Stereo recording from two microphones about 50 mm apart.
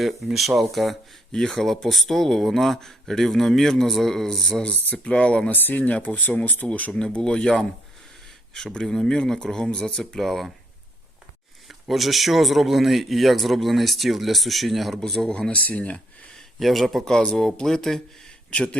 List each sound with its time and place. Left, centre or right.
0.3 s a man's voice: centre
4.7 s speech: left
5.1 s speech: centre
5.5 s speech: left
6.9 s speech: centre
8.5 s speech: centre
11.7 s a man's voice: centre
15.3 s speech: centre
15.5 s speech: left
16.6 s a man's voice: centre
17.1 s speech: centre
18.5 s speech: centre